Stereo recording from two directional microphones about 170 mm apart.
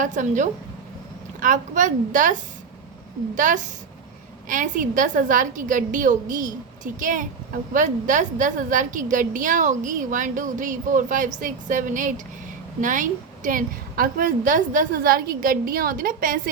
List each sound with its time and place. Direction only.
0.0 s a woman's voice: 45° right (ahead or behind)